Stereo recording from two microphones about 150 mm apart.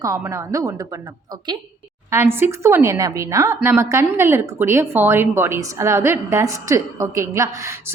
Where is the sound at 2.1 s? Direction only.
15° right (ahead or behind).